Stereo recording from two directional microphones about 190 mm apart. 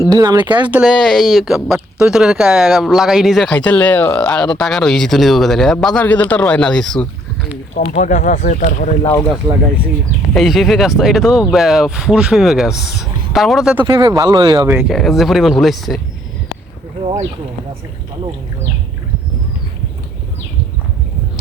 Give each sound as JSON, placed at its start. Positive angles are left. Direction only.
{"t": 0.1, "sound": "speech", "side_deg": -20}
{"t": 0.7, "sound": "speech", "side_deg": -5}
{"t": 7.7, "sound": "speech", "side_deg": 40}
{"t": 9.0, "sound": "speech", "side_deg": 20}
{"t": 10.3, "sound": "speech", "side_deg": 0}
{"t": 13.8, "sound": "speech", "side_deg": -20}
{"t": 14.7, "sound": "speech", "side_deg": 0}